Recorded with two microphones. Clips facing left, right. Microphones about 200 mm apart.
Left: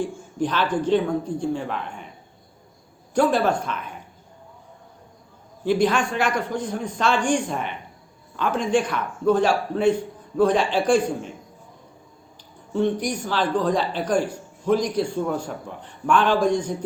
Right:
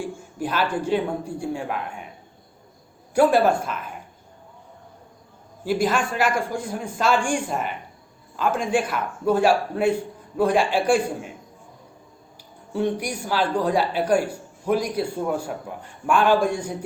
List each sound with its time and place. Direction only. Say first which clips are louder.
0.0 s speech: left 4 dB; 10° right (ahead or behind)
3.2 s speech: right 2 dB; 10° right (ahead or behind)
5.6 s speech: left 2 dB; 5° right (ahead or behind)
12.7 s speech: left 2 dB; 10° right (ahead or behind)